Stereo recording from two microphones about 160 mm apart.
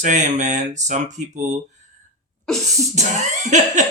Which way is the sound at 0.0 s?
50° right (ahead or behind).